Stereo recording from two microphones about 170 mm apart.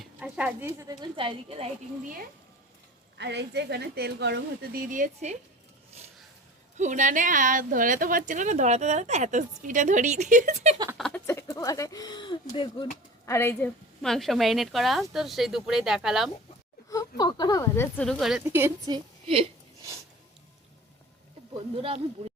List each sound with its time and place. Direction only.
0.0 s speech: 5° right (ahead or behind)
1.1 s a woman's voice: 30° right (ahead or behind)
3.2 s a woman's voice: 90° right; by 5.4 s 45° right (ahead or behind)
6.7 s a woman's voice: 45° right (ahead or behind)
10.9 s speech: 5° left (ahead or behind)
11.3 s speech: 15° left (ahead or behind)
13.2 s speech: 15° left (ahead or behind)
14.0 s speech: centre (ahead or behind)
16.9 s speech: 20° left (ahead or behind)
18.0 s speech: centre (ahead or behind)
18.9 s a woman's voice: 30° right (ahead or behind)
21.8 s a woman's voice: 35° right (ahead or behind)